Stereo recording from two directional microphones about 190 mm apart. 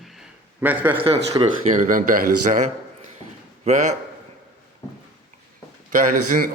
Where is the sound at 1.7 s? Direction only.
45° right (ahead or behind).